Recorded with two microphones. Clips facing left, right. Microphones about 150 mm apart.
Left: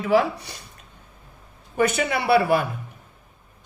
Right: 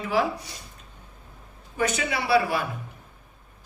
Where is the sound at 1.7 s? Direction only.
55° left (ahead or behind).